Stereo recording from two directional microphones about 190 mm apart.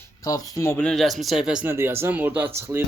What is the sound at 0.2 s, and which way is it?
Speech, 20° left (ahead or behind).